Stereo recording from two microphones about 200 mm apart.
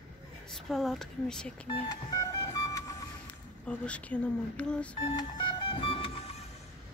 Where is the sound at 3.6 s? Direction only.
5° left (ahead or behind).